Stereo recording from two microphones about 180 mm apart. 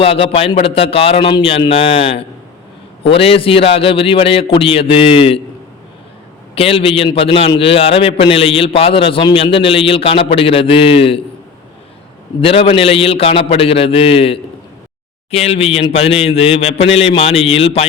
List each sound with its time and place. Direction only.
0.0 s a man's voice: 30° left (ahead or behind)
6.5 s a man's voice: 30° left (ahead or behind)
12.4 s a man's voice: 30° left (ahead or behind)